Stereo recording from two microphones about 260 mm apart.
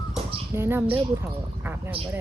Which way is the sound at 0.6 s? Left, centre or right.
Centre.